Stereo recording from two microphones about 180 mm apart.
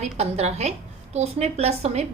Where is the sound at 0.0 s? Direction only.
35° right (ahead or behind).